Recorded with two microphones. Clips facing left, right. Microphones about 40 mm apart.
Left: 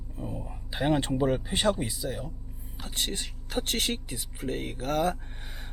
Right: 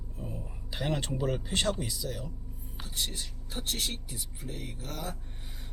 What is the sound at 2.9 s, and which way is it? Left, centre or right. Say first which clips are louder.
Speech: left 4 dB; left.